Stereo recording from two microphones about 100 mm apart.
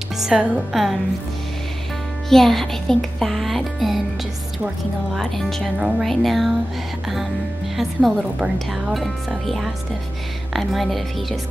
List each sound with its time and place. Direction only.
0.2 s speech: 5° right (ahead or behind)
2.2 s speech: 5° left (ahead or behind)
5.1 s speech: centre (ahead or behind)
7.7 s speech: centre (ahead or behind)